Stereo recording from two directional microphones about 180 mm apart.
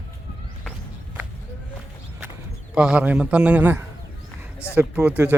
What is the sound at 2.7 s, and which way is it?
A man's voice, 5° right (ahead or behind).